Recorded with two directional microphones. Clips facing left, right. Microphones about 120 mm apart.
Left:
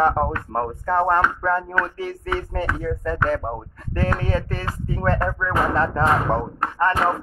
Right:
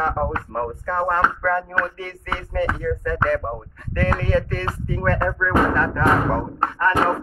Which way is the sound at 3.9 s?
35° left (ahead or behind).